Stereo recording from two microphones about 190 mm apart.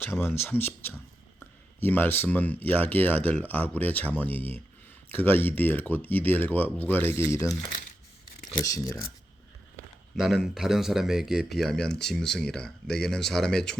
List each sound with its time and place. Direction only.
0.0 s speech: 10° left (ahead or behind)
8.6 s speech: 20° left (ahead or behind)
10.2 s speech: centre (ahead or behind)